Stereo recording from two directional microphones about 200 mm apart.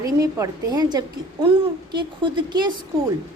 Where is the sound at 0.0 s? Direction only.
15° right (ahead or behind).